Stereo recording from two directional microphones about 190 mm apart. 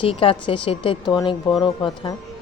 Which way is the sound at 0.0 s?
30° left (ahead or behind).